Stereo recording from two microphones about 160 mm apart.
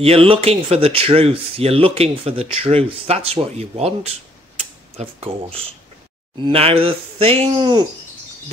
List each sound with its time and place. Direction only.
0.0 s speech: 35° right (ahead or behind)